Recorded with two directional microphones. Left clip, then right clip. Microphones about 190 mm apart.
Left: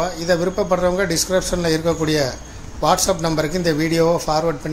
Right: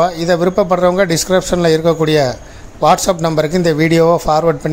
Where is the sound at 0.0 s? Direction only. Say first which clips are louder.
Right 6 dB; 50° right (ahead or behind).